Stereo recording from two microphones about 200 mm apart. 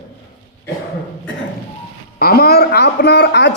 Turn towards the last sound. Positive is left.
turn(degrees=60)  # may be behind; listen again after turning